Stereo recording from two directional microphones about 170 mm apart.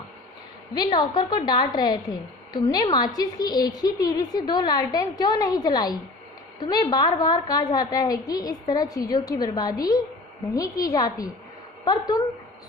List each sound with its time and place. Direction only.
0.9 s a woman's voice: 25° left (ahead or behind)